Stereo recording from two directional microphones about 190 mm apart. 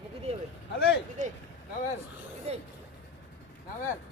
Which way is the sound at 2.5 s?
35° right (ahead or behind).